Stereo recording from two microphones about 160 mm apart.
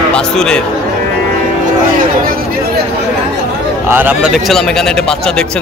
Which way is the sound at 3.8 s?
10° right (ahead or behind).